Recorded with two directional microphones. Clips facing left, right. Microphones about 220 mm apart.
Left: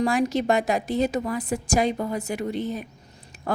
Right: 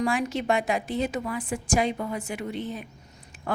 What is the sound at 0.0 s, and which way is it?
A woman's voice, 40° left (ahead or behind).